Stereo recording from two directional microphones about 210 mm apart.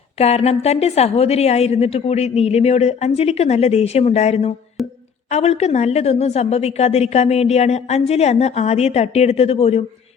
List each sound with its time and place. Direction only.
0.2 s a woman's voice: 30° left (ahead or behind)
4.8 s speech: centre (ahead or behind)
5.3 s a woman's voice: 30° left (ahead or behind)